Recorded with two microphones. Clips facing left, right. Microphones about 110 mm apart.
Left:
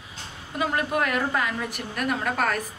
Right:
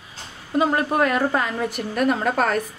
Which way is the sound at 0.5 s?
30° right (ahead or behind).